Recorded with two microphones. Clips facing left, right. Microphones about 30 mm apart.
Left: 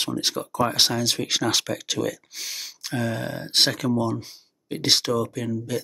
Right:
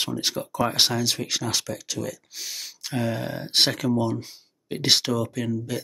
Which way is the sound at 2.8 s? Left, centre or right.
Centre.